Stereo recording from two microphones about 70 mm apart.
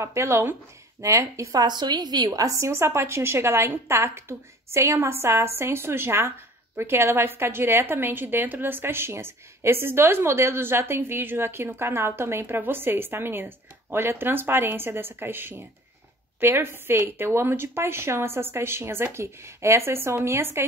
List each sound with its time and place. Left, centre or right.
0.0 s a woman's voice: right
2.4 s a woman's voice: right